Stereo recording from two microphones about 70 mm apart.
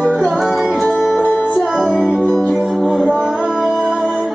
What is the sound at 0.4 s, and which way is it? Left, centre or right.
Music, centre.